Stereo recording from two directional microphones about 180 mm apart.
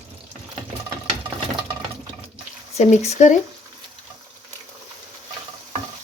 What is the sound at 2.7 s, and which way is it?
Speech, 35° left (ahead or behind).